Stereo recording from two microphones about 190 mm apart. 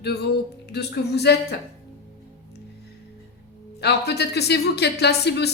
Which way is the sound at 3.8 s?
60° left (ahead or behind).